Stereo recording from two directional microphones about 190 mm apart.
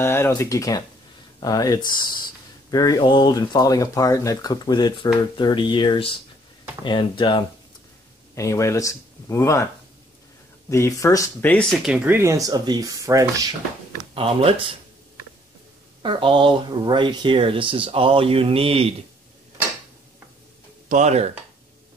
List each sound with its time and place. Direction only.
0.0 s speech: 10° left (ahead or behind)
10.7 s speech: 15° left (ahead or behind)
11.8 s speech: 5° right (ahead or behind)
14.1 s speech: 30° right (ahead or behind)
16.0 s speech: 25° right (ahead or behind)
20.9 s speech: 35° right (ahead or behind)